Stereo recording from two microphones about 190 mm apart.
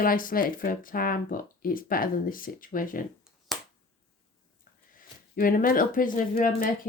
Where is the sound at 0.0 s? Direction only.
45° left (ahead or behind).